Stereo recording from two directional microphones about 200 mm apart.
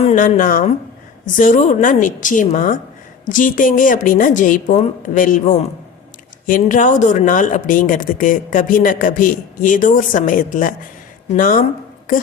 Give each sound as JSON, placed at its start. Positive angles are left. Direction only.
{"t": 0.0, "sound": "speech", "side_deg": 40}